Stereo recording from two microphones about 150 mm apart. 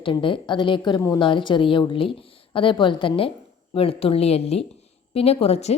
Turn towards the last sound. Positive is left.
turn(degrees=45)  # may be behind; listen again after turning